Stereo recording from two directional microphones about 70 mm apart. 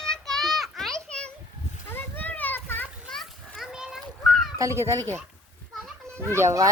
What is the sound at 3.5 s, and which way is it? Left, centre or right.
Splash, centre.